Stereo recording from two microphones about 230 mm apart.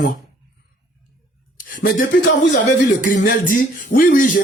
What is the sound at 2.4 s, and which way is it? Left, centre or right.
Speech, left.